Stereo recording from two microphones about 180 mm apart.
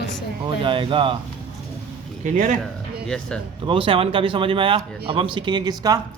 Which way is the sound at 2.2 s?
45° right (ahead or behind).